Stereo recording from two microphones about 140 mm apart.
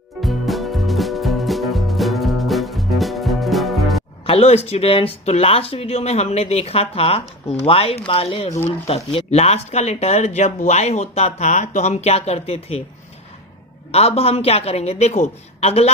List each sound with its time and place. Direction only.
0.2 s music: centre (ahead or behind)
4.3 s speech: 50° left (ahead or behind)
13.9 s speech: 45° left (ahead or behind)